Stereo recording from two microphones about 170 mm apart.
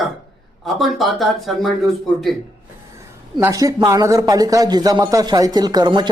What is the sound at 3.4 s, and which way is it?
Speech, 20° right (ahead or behind).